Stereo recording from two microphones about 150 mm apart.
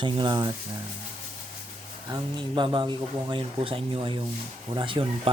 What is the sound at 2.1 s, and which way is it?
Speech, 30° right (ahead or behind).